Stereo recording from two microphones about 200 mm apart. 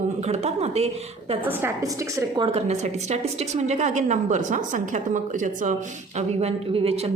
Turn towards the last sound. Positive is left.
turn(degrees=-30)  # may be behind; listen again after turning